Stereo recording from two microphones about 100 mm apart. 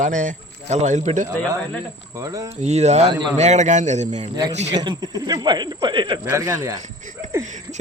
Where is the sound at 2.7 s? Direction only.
90° right.